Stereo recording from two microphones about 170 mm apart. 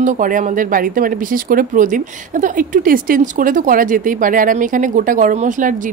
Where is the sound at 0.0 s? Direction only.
50° right (ahead or behind).